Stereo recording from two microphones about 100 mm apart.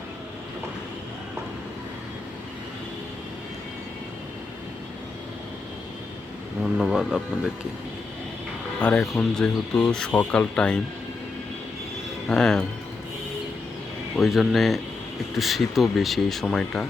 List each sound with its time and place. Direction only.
6.6 s speech: 5° right (ahead or behind)
9.0 s speech: 5° left (ahead or behind)
12.3 s speech: 5° left (ahead or behind)
14.2 s speech: centre (ahead or behind)